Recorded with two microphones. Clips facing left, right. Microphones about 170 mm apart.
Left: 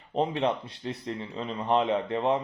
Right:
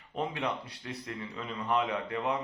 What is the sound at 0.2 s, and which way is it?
Speech, 25° left (ahead or behind).